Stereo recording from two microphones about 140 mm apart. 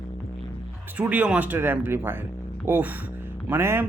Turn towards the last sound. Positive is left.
turn(degrees=-15)  # may be behind; listen again after turning